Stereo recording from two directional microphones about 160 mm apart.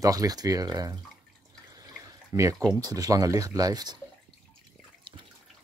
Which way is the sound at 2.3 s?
20° right (ahead or behind).